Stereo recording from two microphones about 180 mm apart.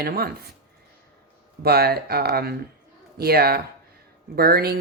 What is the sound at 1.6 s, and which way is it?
Speech, 60° right (ahead or behind).